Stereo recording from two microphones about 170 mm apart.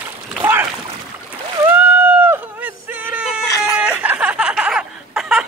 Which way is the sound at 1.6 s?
10° right (ahead or behind).